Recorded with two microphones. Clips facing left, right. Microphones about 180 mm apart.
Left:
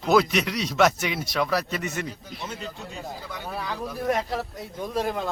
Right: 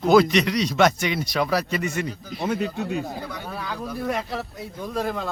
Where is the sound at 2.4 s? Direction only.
60° right (ahead or behind).